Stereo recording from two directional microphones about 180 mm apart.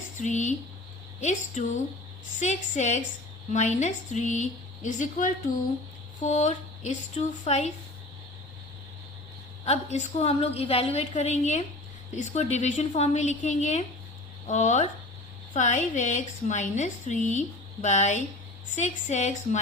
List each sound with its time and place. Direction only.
0.2 s a woman's voice: 40° left (ahead or behind)
9.6 s a woman's voice: 35° left (ahead or behind)